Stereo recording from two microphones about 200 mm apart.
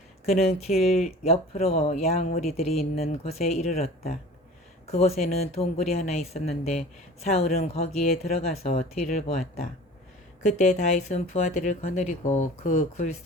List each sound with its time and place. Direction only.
0.3 s speech: 30° left (ahead or behind)
10.4 s speech: 35° left (ahead or behind)